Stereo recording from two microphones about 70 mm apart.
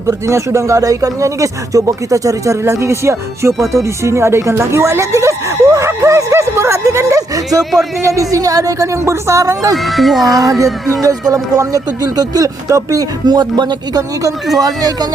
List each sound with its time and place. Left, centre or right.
0.1 s speech: right
7.6 s speech: centre
8.0 s speech: right
9.7 s speech: centre
10.2 s speech: right
13.2 s speech: right